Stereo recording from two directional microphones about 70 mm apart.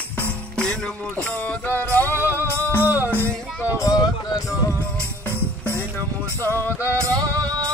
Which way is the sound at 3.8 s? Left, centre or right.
Left.